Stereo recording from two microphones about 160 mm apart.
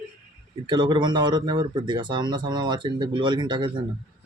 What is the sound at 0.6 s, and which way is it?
Speech, 30° right (ahead or behind).